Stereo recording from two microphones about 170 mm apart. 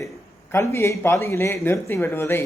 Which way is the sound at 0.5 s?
15° left (ahead or behind).